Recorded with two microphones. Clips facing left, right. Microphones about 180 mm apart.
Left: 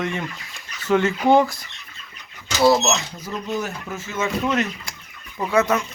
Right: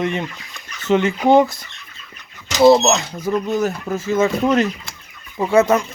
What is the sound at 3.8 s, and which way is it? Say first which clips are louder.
Speech: right 9 dB; 35° right (ahead or behind).